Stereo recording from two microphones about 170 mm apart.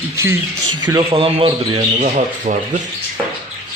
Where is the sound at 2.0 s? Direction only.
45° right (ahead or behind).